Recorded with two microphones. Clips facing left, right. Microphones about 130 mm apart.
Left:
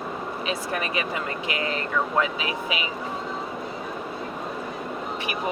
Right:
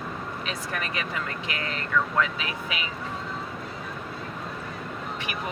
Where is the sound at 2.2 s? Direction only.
10° left (ahead or behind).